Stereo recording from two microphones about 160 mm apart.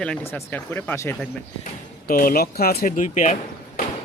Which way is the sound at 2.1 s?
65° left (ahead or behind).